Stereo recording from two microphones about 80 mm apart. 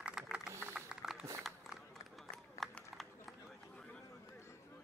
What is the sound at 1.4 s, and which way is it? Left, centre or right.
Run, centre.